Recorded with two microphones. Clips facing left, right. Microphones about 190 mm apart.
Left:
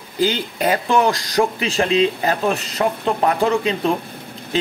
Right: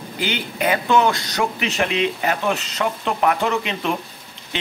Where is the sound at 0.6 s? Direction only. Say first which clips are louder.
Even; 35° left (ahead or behind).